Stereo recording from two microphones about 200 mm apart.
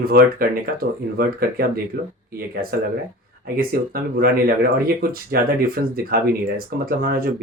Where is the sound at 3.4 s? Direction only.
45° right (ahead or behind).